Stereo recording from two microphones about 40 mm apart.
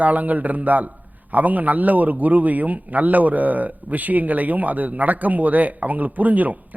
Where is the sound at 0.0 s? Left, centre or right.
Right.